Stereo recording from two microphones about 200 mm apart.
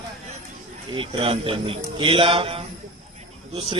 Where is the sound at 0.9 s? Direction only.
25° right (ahead or behind).